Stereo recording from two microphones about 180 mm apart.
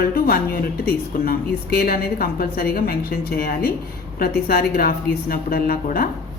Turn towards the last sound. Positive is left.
turn(degrees=55)  # may be behind; listen again after turning